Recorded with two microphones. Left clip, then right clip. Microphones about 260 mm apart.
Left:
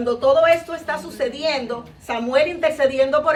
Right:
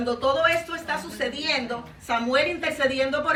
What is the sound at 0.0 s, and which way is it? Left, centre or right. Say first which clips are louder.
Speech: left 7 dB; centre.